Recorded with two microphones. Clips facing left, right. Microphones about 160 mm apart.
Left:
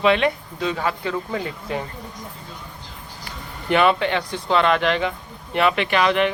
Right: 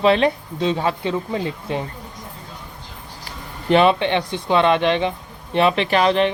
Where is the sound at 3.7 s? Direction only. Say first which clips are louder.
Right 3 dB; 25° right (ahead or behind).